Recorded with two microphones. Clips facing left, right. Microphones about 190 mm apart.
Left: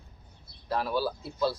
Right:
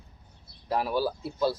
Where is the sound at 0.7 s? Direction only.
15° right (ahead or behind).